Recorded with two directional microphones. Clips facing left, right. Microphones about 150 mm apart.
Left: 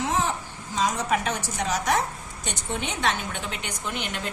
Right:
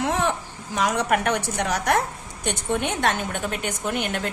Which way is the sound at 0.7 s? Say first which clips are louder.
Right 3 dB; 70° right (ahead or behind).